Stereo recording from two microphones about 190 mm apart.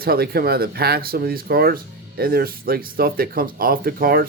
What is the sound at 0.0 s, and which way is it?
Speech, 55° right (ahead or behind).